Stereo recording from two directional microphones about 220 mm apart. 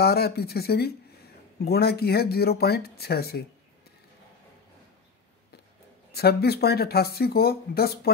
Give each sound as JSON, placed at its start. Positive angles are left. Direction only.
{"t": 0.0, "sound": "speech", "side_deg": 45}
{"t": 6.1, "sound": "speech", "side_deg": 45}